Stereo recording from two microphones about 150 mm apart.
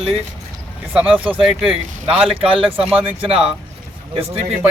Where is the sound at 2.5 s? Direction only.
35° right (ahead or behind).